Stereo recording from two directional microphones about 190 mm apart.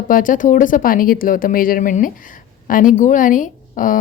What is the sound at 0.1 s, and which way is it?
A woman's voice, 45° left (ahead or behind).